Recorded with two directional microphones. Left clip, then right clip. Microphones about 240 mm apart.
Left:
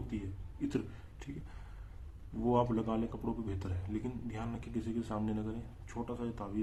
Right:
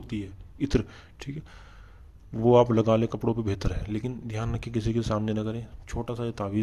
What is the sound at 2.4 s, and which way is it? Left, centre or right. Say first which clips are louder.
Speech: right 12 dB; right.